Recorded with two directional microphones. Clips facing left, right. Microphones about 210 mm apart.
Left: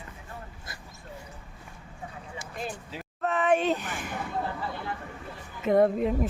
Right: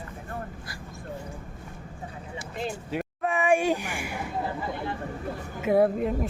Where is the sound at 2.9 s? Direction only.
60° right (ahead or behind).